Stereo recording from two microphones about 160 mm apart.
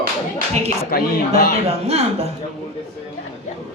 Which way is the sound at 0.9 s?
65° left (ahead or behind).